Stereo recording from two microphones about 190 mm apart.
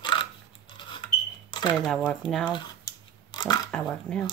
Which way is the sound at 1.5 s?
25° left (ahead or behind).